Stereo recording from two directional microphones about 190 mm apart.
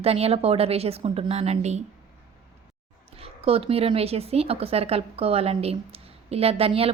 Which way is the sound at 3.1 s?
30° right (ahead or behind).